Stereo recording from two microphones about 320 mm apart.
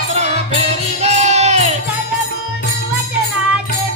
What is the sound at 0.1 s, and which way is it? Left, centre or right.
Music, centre.